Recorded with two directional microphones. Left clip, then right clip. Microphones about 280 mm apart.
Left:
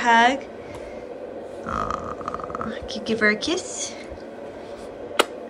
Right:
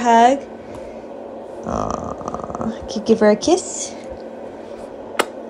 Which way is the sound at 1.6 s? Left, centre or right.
Right.